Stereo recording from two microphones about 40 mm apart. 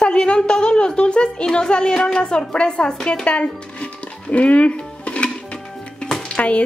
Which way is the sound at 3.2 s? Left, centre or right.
Left.